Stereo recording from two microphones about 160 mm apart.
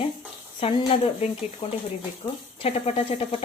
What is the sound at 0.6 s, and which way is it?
Speech, 35° left (ahead or behind).